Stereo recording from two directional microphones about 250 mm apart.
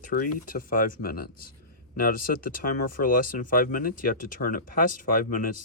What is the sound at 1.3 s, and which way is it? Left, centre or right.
Speech, left.